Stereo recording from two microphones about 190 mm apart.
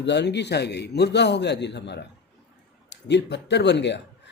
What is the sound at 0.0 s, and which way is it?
Speech, 65° left (ahead or behind).